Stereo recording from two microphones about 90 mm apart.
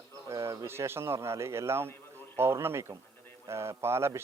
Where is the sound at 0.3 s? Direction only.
35° right (ahead or behind).